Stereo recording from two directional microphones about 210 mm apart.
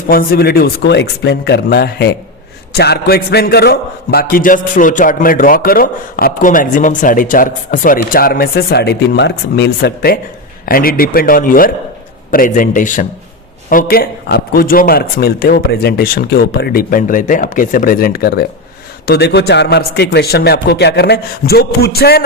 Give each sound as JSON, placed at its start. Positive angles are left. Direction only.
{"t": 0.1, "sound": "a man's voice", "side_deg": 45}